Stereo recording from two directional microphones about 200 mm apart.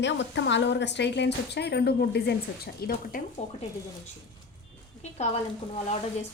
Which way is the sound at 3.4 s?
35° left (ahead or behind).